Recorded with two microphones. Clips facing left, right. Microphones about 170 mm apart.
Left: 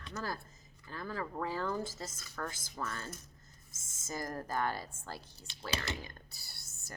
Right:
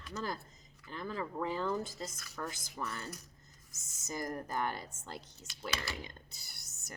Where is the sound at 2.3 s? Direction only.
20° right (ahead or behind).